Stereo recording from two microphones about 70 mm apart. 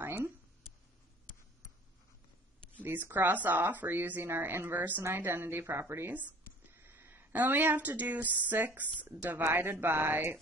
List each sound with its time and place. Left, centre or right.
2.8 s speech: right